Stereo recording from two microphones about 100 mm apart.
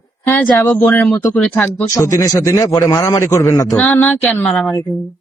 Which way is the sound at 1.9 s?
30° left (ahead or behind).